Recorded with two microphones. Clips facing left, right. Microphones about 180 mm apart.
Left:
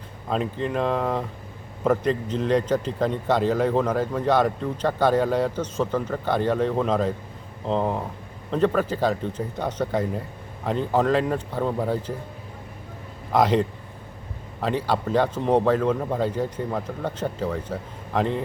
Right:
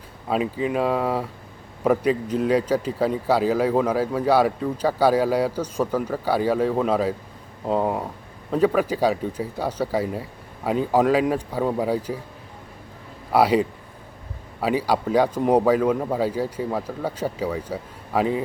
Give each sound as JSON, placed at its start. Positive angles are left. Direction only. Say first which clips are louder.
{"t": 0.3, "sound": "a man's voice", "louder": "right 2 dB", "side_deg": -5}
{"t": 13.3, "sound": "a man's voice", "louder": "right 2 dB", "side_deg": -10}